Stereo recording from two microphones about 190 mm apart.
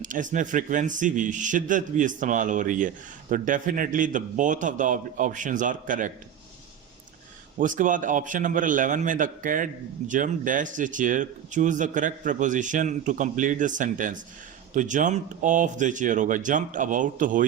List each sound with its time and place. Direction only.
0.0 s a man's voice: 45° right (ahead or behind)
7.6 s a man's voice: 45° right (ahead or behind)